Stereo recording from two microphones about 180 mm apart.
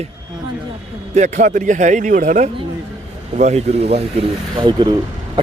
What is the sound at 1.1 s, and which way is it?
Speech, 40° right (ahead or behind).